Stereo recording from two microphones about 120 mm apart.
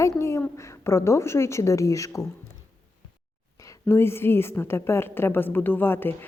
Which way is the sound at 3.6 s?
25° left (ahead or behind).